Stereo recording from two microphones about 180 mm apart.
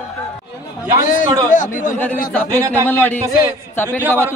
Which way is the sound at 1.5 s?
45° left (ahead or behind).